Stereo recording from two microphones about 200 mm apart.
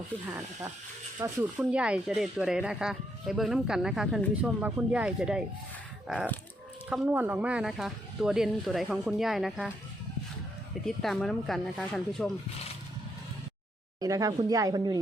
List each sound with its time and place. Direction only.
1.2 s speech: 10° right (ahead or behind)
6.9 s speech: 5° right (ahead or behind)
10.8 s speech: centre (ahead or behind)
14.0 s speech: 15° right (ahead or behind)